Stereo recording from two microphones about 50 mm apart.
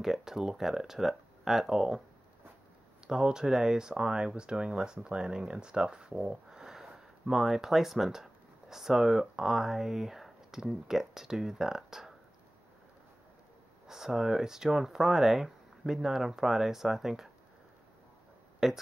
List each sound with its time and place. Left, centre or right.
0.0 s speech: centre
3.1 s speech: centre
6.6 s speech: centre
13.8 s speech: centre
18.6 s speech: centre